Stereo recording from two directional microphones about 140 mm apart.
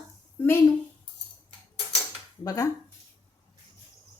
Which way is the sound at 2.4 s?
25° left (ahead or behind).